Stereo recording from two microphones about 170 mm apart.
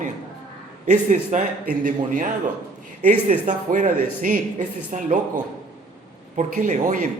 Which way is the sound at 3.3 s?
45° right (ahead or behind).